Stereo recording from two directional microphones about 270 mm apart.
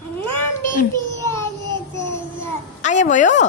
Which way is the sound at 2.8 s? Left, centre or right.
Left.